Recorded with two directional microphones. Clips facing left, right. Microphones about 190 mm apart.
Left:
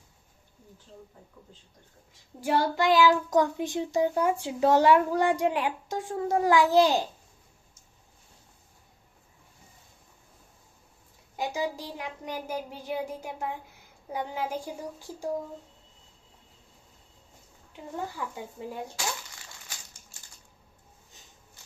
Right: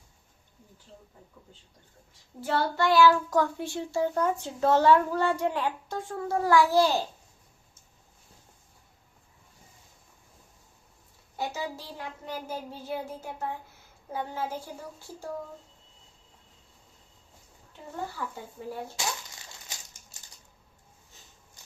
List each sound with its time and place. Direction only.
2.4 s a child's voice: 15° left (ahead or behind)
11.3 s a child's voice: 15° left (ahead or behind)
18.3 s a child's voice: 15° left (ahead or behind)